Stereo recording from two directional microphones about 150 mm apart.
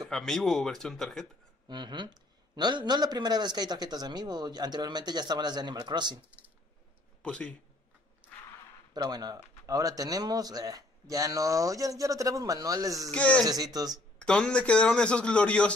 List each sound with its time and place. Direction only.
0.1 s speech: 5° left (ahead or behind)
1.7 s a man's voice: 30° right (ahead or behind)
7.2 s a man's voice: 10° left (ahead or behind)
8.9 s a man's voice: 25° right (ahead or behind)
13.1 s a man's voice: 10° left (ahead or behind)
13.5 s a man's voice: 25° right (ahead or behind)
14.1 s a man's voice: 5° left (ahead or behind)